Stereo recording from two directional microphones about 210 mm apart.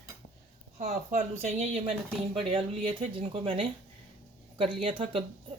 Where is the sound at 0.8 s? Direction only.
30° right (ahead or behind).